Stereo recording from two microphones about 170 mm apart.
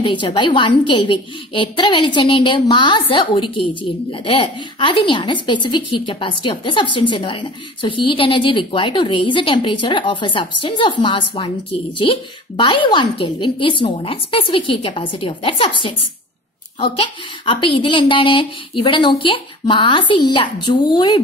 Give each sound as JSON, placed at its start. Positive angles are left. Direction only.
{"t": 0.0, "sound": "a woman's voice", "side_deg": 30}